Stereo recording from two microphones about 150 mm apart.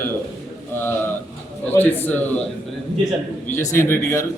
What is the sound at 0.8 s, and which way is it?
Bird, 15° left (ahead or behind).